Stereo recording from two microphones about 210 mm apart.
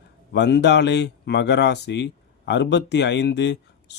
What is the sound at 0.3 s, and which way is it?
Speech, 55° left (ahead or behind).